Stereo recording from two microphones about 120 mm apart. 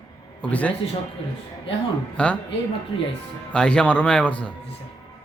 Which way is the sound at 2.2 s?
10° left (ahead or behind).